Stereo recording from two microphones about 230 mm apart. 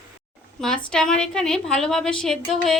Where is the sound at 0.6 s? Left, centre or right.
Centre.